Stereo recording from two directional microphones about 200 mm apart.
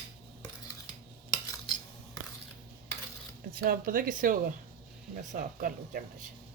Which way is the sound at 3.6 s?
45° right (ahead or behind).